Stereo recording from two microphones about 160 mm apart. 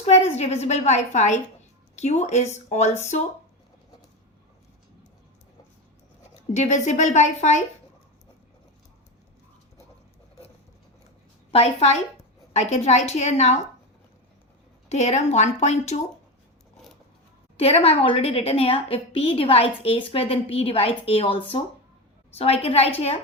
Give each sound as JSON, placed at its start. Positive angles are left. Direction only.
{"t": 0.0, "sound": "a woman's voice", "side_deg": 40}
{"t": 6.5, "sound": "a woman's voice", "side_deg": 45}
{"t": 11.5, "sound": "a woman's voice", "side_deg": 40}
{"t": 14.8, "sound": "a woman's voice", "side_deg": 45}
{"t": 17.6, "sound": "a woman's voice", "side_deg": 40}